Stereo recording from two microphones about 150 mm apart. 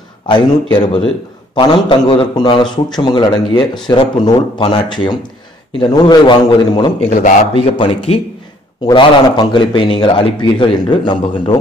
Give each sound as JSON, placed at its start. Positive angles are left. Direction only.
{"t": 0.3, "sound": "a man's voice", "side_deg": 30}